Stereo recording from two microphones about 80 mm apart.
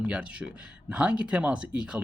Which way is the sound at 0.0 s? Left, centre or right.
Centre.